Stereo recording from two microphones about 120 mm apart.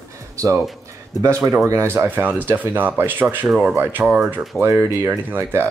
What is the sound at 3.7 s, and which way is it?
Speech, 15° right (ahead or behind).